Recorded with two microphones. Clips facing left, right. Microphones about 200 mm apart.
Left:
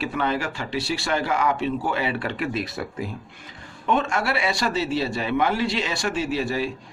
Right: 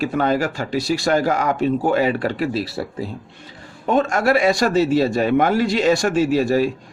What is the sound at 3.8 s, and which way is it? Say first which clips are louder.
A man's voice: right 6 dB; 40° right (ahead or behind).